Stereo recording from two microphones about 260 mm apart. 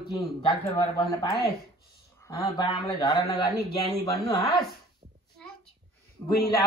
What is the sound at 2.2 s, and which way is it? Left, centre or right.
A man's voice, centre.